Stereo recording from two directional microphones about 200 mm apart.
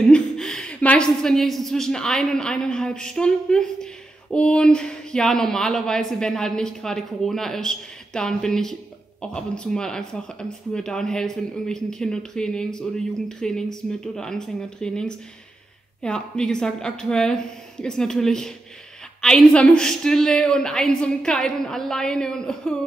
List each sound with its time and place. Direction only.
0.1 s a woman's voice: 5° left (ahead or behind)